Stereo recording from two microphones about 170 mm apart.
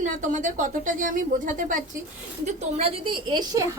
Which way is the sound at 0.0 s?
45° right (ahead or behind).